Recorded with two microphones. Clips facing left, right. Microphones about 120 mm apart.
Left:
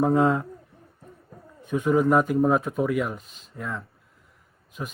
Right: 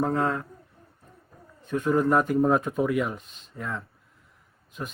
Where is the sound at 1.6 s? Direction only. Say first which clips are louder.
Left 2 dB; 10° left (ahead or behind).